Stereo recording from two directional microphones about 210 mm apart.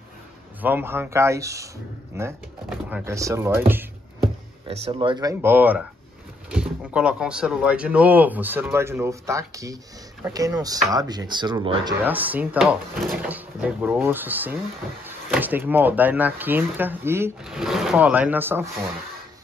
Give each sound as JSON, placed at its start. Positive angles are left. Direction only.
{"t": 0.6, "sound": "speech", "side_deg": -10}
{"t": 4.6, "sound": "speech", "side_deg": -25}
{"t": 12.0, "sound": "speech", "side_deg": -10}
{"t": 17.5, "sound": "speech", "side_deg": 0}